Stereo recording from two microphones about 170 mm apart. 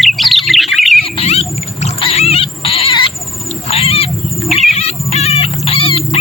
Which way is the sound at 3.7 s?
35° left (ahead or behind).